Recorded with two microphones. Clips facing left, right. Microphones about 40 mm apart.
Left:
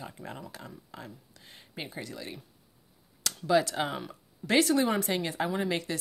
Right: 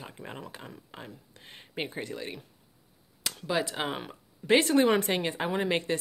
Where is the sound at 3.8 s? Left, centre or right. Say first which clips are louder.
Right 1 dB; right.